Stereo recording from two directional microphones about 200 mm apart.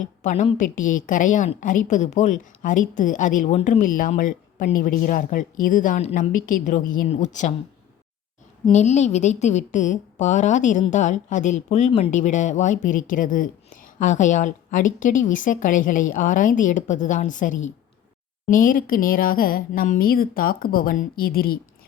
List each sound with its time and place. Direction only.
0.0 s a woman's voice: 40° left (ahead or behind)
8.7 s a woman's voice: 35° left (ahead or behind)